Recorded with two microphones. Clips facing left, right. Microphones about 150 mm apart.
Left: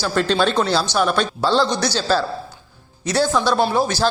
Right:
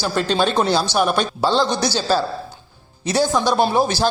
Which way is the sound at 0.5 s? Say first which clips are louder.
Right 1 dB; 20° right (ahead or behind).